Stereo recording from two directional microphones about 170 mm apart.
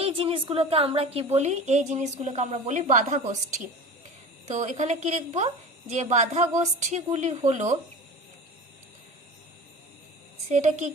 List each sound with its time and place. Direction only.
0.0 s a woman's voice: 35° right (ahead or behind)
4.4 s a woman's voice: 45° right (ahead or behind)
10.5 s a woman's voice: 45° right (ahead or behind)